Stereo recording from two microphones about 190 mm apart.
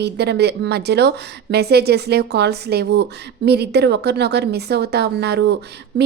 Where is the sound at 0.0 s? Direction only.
60° right (ahead or behind).